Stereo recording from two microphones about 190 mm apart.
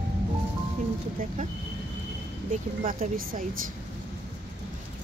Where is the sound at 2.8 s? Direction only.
45° right (ahead or behind).